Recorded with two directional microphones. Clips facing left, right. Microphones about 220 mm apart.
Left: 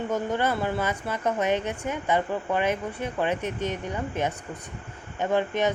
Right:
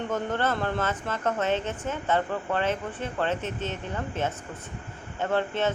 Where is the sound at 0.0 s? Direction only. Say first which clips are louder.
Left 2 dB; 10° left (ahead or behind).